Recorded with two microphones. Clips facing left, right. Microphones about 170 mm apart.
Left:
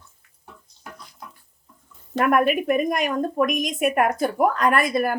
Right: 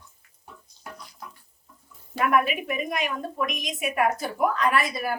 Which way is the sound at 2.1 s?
45° left (ahead or behind).